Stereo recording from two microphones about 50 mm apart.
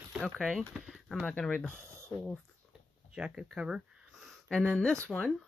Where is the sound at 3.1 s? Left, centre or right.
Centre.